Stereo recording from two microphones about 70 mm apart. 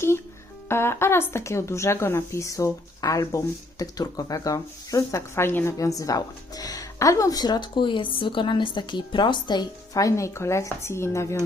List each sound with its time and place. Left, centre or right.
0.7 s speech: left
5.4 s speech: left
5.7 s speech: left
7.3 s speech: left
8.4 s speech: left
10.0 s speech: left